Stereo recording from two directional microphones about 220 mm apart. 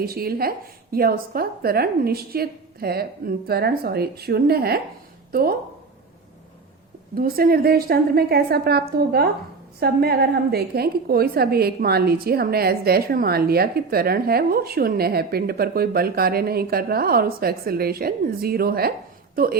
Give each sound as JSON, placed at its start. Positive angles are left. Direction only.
{"t": 0.0, "sound": "a woman's voice", "side_deg": -45}
{"t": 7.2, "sound": "a woman's voice", "side_deg": -40}